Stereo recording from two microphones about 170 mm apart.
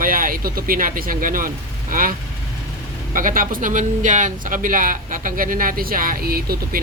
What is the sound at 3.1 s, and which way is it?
Speech, 55° right (ahead or behind).